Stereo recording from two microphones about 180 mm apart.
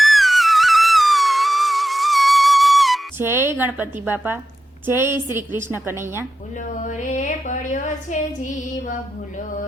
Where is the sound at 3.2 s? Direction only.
15° right (ahead or behind).